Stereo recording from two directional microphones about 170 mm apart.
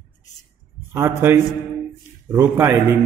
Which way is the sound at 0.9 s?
15° right (ahead or behind).